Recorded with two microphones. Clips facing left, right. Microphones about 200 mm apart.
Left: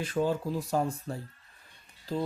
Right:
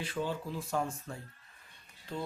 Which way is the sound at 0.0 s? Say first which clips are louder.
Left 7 dB; 45° left (ahead or behind).